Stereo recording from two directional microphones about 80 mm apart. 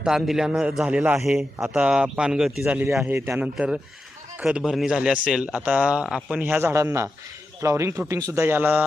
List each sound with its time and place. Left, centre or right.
0.0 s a man's voice: centre
1.6 s speech: centre
2.6 s a man's voice: right
3.4 s speech: centre
6.4 s speech: right
8.5 s a man's voice: right